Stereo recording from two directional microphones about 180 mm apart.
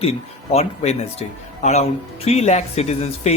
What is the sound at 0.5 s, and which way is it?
Speech, 35° left (ahead or behind).